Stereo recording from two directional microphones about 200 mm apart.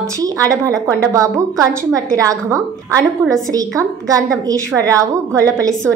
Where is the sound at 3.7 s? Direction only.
15° right (ahead or behind).